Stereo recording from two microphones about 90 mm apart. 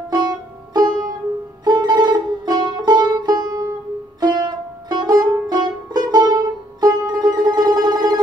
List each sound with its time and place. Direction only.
0.1 s music: 50° right (ahead or behind)